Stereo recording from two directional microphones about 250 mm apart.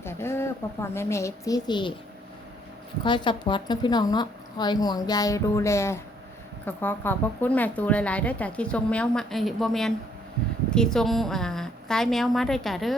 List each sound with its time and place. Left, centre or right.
0.0 s a woman's voice: centre
3.0 s a woman's voice: centre